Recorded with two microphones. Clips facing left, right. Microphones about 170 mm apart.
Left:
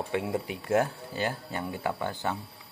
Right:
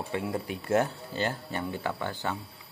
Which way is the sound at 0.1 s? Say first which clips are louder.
Even; 15° left (ahead or behind).